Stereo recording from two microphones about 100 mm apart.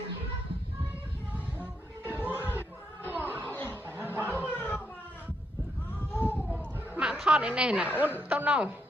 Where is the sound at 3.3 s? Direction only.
20° left (ahead or behind).